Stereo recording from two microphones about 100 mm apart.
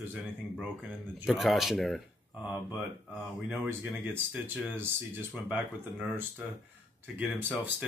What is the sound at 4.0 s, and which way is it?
Speech, 20° right (ahead or behind).